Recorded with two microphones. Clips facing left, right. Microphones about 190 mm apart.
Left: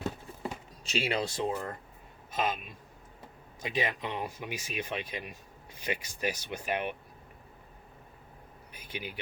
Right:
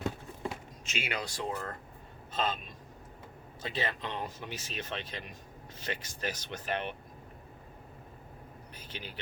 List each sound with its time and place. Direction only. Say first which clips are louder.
0.9 s speech: left 6 dB; 35° left (ahead or behind); by 6.9 s 10° left (ahead or behind)
8.7 s vehicle: left 5 dB; 10° left (ahead or behind)